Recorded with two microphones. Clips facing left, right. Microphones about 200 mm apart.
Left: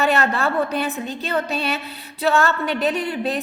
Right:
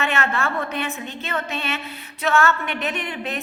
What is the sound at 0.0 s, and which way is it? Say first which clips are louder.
A woman's voice: left 4 dB; 35° left (ahead or behind).